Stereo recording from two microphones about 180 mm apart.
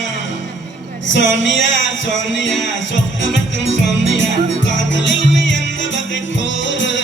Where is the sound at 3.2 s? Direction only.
90° left.